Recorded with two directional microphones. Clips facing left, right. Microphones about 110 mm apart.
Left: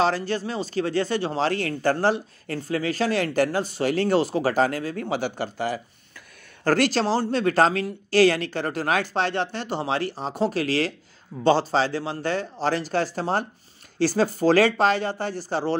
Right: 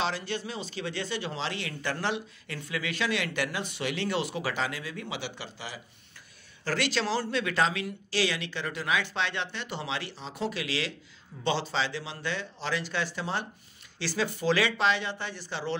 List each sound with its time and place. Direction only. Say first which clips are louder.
0.0 s speech: left 8 dB; 40° left (ahead or behind)